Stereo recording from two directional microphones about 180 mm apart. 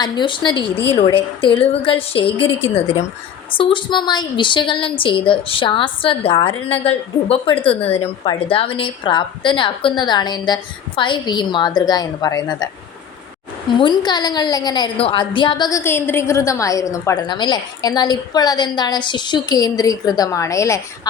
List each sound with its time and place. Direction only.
0.0 s a woman's voice: 25° left (ahead or behind)
13.7 s a woman's voice: 25° left (ahead or behind)